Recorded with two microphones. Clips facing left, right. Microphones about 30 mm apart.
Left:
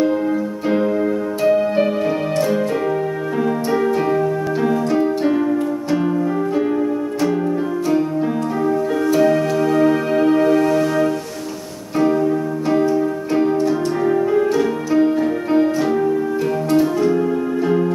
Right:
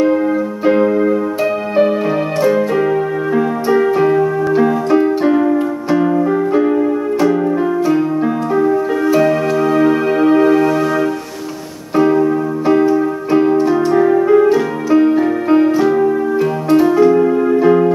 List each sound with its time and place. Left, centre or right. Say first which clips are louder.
0.7 s keyboard: right 6 dB; centre
2.4 s keyboard: right 5 dB; centre
7.9 s music: right 4 dB; centre
17.1 s music: right 7 dB; right